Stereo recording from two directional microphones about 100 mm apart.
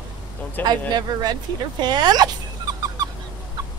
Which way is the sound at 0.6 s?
20° left (ahead or behind).